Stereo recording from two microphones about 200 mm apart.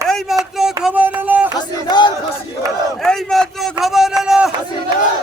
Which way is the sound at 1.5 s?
20° left (ahead or behind).